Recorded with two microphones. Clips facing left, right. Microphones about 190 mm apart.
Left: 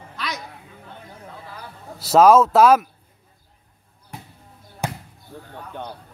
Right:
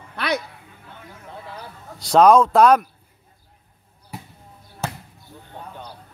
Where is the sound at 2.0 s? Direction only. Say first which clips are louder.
Even; 5° left (ahead or behind).